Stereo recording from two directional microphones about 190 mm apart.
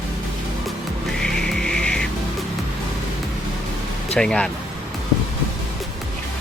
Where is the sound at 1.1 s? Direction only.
5° left (ahead or behind).